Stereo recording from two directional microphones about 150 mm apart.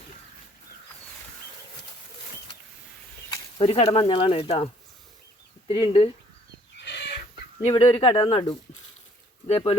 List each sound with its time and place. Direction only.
3.2 s speech: 40° left (ahead or behind)
7.6 s speech: 40° left (ahead or behind)